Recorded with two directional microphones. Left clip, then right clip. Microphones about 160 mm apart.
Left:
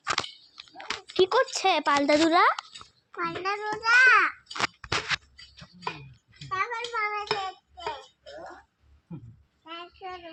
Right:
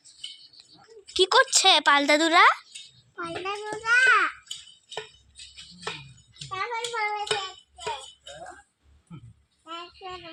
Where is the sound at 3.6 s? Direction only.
20° left (ahead or behind).